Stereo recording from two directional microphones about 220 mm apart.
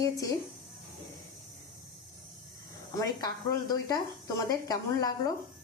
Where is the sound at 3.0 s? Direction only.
15° left (ahead or behind).